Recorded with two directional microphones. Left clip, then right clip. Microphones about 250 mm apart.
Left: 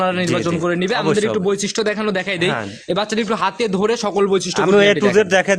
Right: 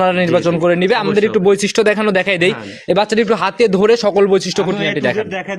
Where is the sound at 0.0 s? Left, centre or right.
Centre.